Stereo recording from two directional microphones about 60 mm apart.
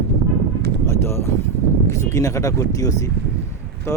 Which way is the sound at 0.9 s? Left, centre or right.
Left.